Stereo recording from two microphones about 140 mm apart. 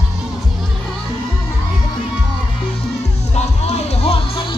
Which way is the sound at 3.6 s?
50° left (ahead or behind).